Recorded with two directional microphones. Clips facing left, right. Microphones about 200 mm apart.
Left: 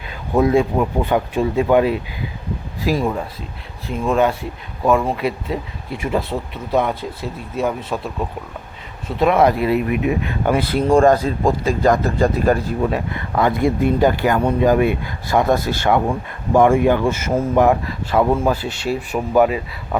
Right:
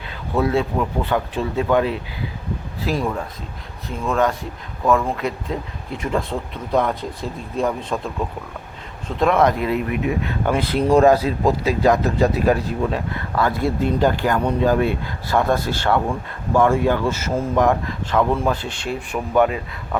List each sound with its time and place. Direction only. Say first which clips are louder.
0.3 s speech: left 4 dB; 15° left (ahead or behind)
4.9 s speech: left 2 dB; 10° left (ahead or behind)
13.1 s speech: left 3 dB; 20° left (ahead or behind)